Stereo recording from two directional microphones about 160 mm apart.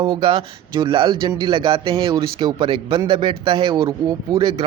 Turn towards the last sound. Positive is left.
turn(degrees=-25)  # may be behind; listen again after turning